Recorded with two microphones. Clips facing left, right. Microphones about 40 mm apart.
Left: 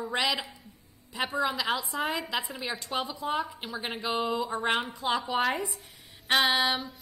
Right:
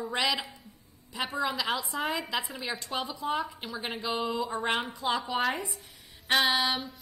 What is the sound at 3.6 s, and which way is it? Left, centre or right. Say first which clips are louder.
A woman's voice: left 1 dB; centre.